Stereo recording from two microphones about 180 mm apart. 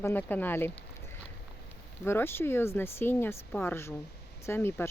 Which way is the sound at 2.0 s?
10° left (ahead or behind).